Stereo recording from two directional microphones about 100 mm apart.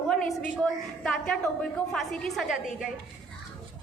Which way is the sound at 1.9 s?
5° left (ahead or behind).